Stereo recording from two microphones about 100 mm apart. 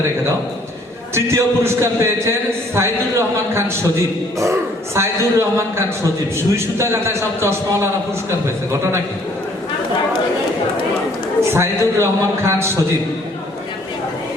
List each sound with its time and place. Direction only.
1.1 s a man's voice: 25° right (ahead or behind)
4.9 s a man's voice: 25° right (ahead or behind)
11.5 s a man's voice: 25° right (ahead or behind)